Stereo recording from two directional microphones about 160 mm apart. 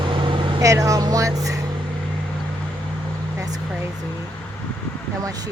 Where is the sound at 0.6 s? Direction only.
20° right (ahead or behind).